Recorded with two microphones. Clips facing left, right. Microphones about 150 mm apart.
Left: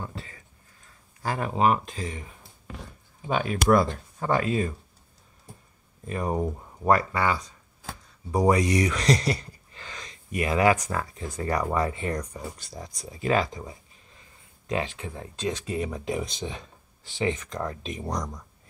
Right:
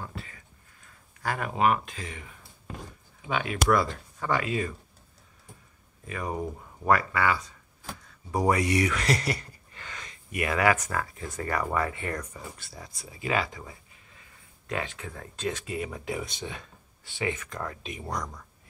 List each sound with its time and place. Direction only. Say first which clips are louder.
0.0 s a sound: left 2 dB; 30° left (ahead or behind)
1.2 s speech: left 2 dB; 30° left (ahead or behind)
6.0 s speech: left 5 dB; 40° left (ahead or behind)
7.1 s speech: left 1 dB; 30° left (ahead or behind)
8.4 s speech: left 3 dB; 35° left (ahead or behind)
13.0 s speech: left 4 dB; 40° left (ahead or behind)
14.7 s speech: left 4 dB; 25° left (ahead or behind)
15.6 s speech: left 4 dB; 35° left (ahead or behind)
15.9 s speech: left 4 dB; 25° left (ahead or behind)